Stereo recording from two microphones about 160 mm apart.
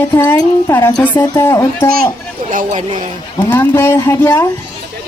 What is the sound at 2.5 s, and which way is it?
Speech, 55° right (ahead or behind).